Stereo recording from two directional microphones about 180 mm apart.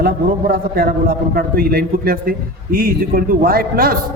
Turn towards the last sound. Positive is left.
turn(degrees=-55)  # may be behind; listen again after turning